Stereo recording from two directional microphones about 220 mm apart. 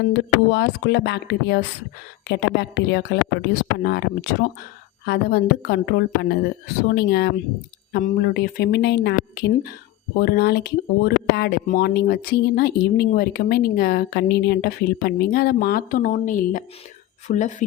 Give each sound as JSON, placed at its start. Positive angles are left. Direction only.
{"t": 0.5, "sound": "speech", "side_deg": 50}